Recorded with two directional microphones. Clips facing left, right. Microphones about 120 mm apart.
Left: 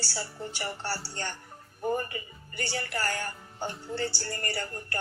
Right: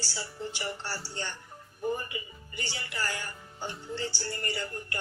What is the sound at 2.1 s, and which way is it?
Speech, 45° left (ahead or behind).